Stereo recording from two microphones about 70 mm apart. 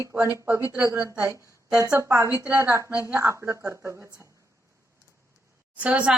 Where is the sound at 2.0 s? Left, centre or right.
Right.